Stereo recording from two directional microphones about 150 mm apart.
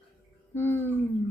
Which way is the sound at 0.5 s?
15° left (ahead or behind).